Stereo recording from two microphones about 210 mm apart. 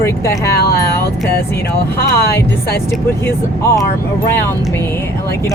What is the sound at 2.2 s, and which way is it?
Speech, 50° left (ahead or behind).